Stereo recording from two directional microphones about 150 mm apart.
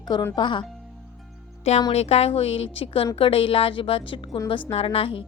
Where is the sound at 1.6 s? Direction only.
45° left (ahead or behind).